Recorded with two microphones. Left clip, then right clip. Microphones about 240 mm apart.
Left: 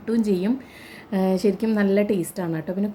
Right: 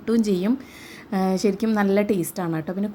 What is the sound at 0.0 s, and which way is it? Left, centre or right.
A woman's voice, centre.